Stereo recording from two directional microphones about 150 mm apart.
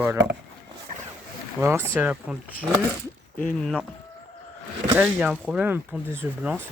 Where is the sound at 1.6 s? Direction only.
15° right (ahead or behind).